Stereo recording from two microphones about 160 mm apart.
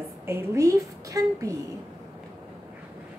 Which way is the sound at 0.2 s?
15° right (ahead or behind).